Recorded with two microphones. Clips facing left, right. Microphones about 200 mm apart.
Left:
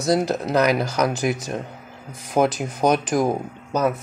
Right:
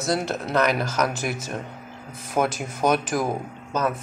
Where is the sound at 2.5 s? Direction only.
5° right (ahead or behind).